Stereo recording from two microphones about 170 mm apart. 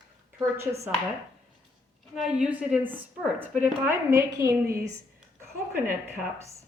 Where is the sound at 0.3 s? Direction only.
15° right (ahead or behind).